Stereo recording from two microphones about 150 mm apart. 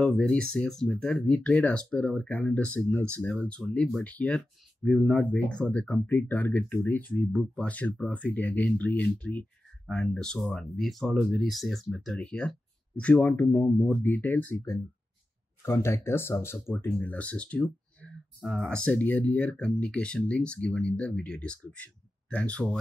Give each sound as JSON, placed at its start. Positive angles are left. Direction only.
{"t": 0.0, "sound": "speech", "side_deg": 10}